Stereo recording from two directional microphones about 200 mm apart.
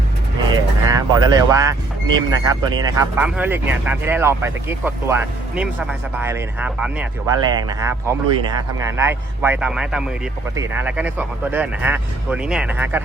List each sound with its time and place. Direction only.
0.5 s speech: 20° right (ahead or behind)
3.2 s speech: 5° right (ahead or behind)
7.3 s a man's voice: 15° right (ahead or behind)